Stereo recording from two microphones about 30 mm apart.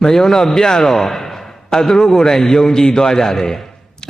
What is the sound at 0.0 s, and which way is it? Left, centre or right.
A man's voice, centre.